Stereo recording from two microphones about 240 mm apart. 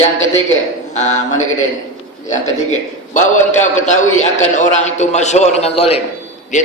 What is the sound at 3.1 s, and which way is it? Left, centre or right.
A man's voice, left.